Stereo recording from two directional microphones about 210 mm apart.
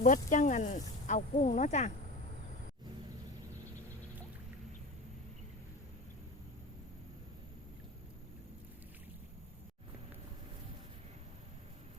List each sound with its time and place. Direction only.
0.0 s speech: 35° left (ahead or behind)